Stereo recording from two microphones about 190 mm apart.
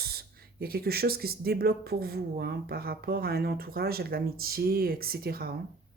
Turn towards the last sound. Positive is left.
turn(degrees=-55)  # may be behind; listen again after turning